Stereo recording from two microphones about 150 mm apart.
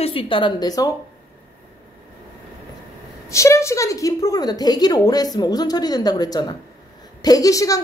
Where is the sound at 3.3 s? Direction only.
20° left (ahead or behind).